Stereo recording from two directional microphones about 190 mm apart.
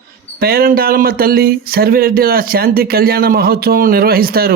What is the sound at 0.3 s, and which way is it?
Speech, 55° right (ahead or behind).